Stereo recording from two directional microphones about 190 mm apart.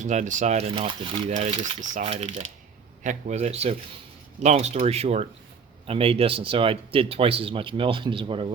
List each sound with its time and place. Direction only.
0.0 s speech: 40° right (ahead or behind)
1.3 s speech: 40° right (ahead or behind)